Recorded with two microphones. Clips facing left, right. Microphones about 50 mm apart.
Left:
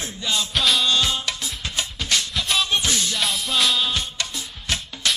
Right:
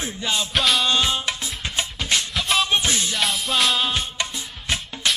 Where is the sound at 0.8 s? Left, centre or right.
Right.